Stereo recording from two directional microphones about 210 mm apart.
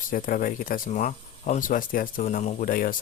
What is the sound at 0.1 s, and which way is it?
Speech, 40° left (ahead or behind).